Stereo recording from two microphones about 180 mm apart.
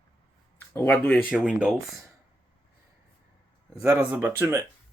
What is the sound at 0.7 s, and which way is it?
Speech, 10° left (ahead or behind).